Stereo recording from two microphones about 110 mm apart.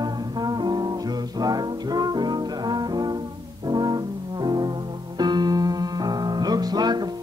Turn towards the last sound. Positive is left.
turn(degrees=-40)  # may be behind; listen again after turning